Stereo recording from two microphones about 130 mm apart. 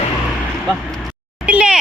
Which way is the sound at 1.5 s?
10° right (ahead or behind).